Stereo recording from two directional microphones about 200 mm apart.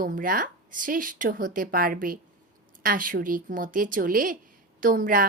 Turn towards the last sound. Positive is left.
turn(degrees=-45)  # may be behind; listen again after turning